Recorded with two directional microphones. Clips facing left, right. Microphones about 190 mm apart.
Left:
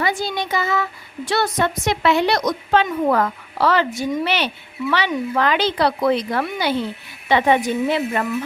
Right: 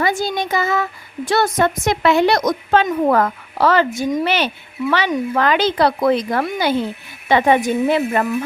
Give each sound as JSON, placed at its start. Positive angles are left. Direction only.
{"t": 0.0, "sound": "speech", "side_deg": -45}